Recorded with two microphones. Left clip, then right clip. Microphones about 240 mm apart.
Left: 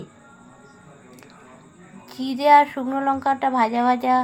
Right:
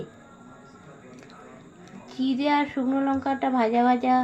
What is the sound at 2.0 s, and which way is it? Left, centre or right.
A woman's voice, left.